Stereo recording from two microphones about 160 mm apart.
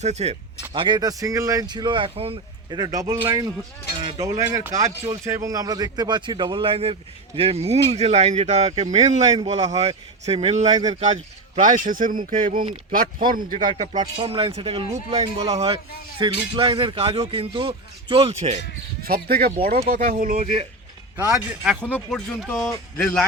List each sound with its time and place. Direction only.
0.0 s a man's voice: 45° right (ahead or behind)
0.7 s a man's voice: 30° right (ahead or behind); by 14.1 s 50° right (ahead or behind)
14.2 s speech: 35° right (ahead or behind)
19.0 s a man's voice: 70° right (ahead or behind); by 20.7 s 45° right (ahead or behind)
21.3 s speech: centre (ahead or behind)